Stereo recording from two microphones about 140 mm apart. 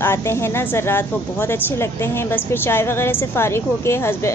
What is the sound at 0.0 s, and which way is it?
A woman's voice, 15° left (ahead or behind).